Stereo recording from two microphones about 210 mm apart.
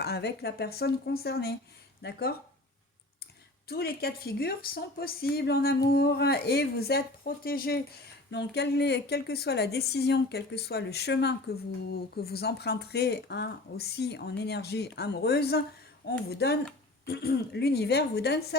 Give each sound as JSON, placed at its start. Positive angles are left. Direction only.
{"t": 0.0, "sound": "speech", "side_deg": 50}
{"t": 3.7, "sound": "speech", "side_deg": 45}